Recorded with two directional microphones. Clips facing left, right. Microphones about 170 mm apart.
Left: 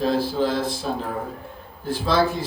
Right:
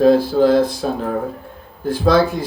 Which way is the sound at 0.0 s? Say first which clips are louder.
Right 9 dB; 50° right (ahead or behind).